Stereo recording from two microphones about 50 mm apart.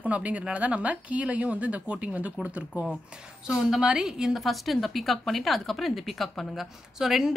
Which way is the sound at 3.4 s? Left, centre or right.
Centre.